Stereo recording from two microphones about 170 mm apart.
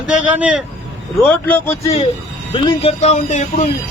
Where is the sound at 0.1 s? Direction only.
10° right (ahead or behind).